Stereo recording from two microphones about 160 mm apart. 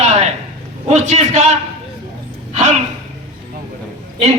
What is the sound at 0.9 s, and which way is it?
Speech, 45° right (ahead or behind).